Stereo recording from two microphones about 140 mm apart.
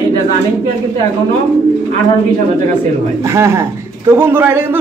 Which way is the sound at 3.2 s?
20° right (ahead or behind).